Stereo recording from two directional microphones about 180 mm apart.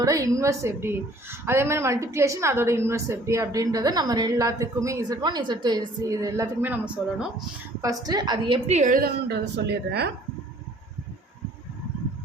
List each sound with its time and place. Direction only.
0.0 s a woman's voice: 20° right (ahead or behind)
7.8 s a woman's voice: 20° right (ahead or behind); by 10.1 s 65° right (ahead or behind)